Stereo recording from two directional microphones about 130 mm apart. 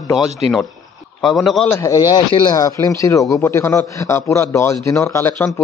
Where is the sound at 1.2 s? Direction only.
Centre (ahead or behind).